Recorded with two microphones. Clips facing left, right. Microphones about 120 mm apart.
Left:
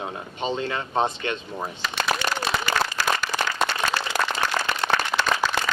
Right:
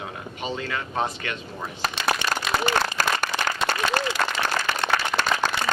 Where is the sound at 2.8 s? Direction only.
50° right (ahead or behind).